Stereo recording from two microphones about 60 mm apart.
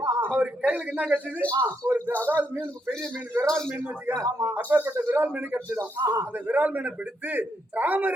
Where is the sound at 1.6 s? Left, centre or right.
Right.